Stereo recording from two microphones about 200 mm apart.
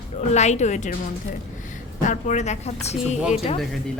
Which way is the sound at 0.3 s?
35° left (ahead or behind).